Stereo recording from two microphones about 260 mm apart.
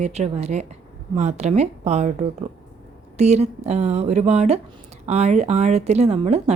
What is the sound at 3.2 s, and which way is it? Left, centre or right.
A woman's voice, right.